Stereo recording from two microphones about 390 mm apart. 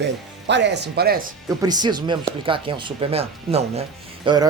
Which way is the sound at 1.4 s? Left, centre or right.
Centre.